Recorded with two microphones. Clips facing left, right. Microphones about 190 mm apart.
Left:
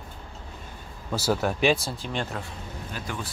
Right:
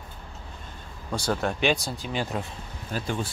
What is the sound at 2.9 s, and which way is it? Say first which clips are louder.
Speech: right 6 dB; 30° right (ahead or behind).